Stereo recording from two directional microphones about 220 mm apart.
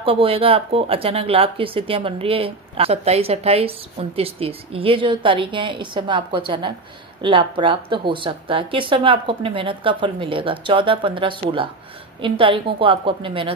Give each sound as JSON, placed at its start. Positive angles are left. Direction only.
{"t": 0.0, "sound": "speech", "side_deg": -25}